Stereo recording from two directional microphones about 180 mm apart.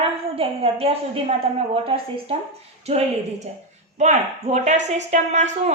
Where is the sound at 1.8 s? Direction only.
30° right (ahead or behind).